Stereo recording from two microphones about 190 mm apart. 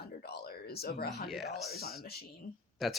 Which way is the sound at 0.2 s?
55° left (ahead or behind).